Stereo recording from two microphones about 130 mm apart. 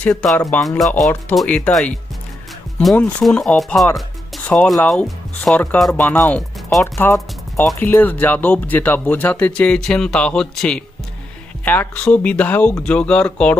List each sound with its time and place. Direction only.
0.0 s speech: 5° left (ahead or behind)